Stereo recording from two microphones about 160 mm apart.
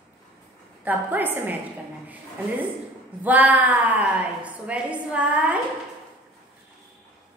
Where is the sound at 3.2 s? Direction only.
10° right (ahead or behind).